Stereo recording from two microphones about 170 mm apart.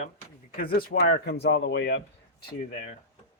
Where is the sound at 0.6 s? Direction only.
60° left (ahead or behind); by 2.0 s 90° left.